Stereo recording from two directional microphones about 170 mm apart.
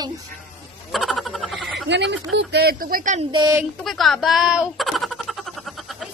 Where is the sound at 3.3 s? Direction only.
25° right (ahead or behind).